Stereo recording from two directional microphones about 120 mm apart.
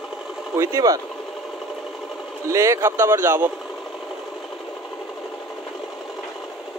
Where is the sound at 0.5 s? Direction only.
30° right (ahead or behind).